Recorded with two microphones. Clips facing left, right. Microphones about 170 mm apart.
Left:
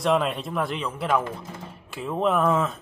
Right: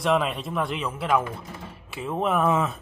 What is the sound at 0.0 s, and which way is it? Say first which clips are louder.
Speech: left 1 dB; centre (ahead or behind).